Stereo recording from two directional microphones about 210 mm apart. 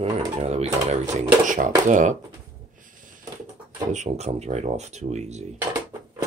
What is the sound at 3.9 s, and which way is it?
Speech, 35° right (ahead or behind).